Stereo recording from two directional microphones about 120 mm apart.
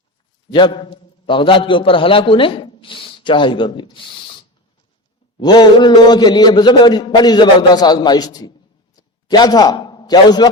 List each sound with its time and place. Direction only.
0.5 s a man's voice: 45° left (ahead or behind)
5.4 s a man's voice: 35° left (ahead or behind)
9.0 s a sound: 35° left (ahead or behind)